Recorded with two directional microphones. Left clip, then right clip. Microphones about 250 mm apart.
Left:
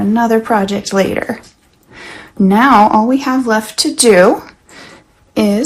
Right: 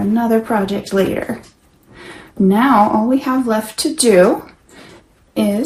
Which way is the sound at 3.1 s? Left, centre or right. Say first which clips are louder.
Left 3 dB; left.